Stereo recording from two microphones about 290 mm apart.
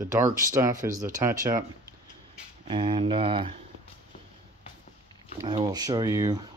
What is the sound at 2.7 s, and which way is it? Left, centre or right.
Speech, centre.